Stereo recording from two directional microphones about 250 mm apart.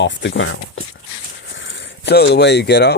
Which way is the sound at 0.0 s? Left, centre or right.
Left.